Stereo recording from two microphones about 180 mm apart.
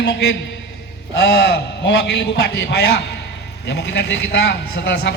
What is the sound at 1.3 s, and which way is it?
A man's voice, 65° left (ahead or behind).